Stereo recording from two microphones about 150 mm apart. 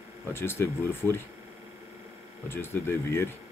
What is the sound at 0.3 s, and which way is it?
Speech, 15° left (ahead or behind).